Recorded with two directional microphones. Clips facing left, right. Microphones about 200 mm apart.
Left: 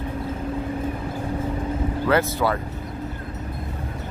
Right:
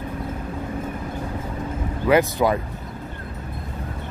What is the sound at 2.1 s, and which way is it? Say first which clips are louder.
Speech: right 4 dB; 15° right (ahead or behind).